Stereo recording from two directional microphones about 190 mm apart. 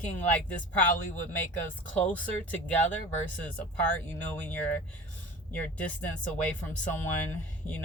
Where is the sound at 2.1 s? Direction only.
5° left (ahead or behind).